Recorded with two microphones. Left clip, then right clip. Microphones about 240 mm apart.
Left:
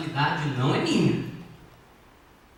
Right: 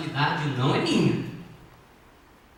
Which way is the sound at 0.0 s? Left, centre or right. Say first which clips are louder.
Even; centre.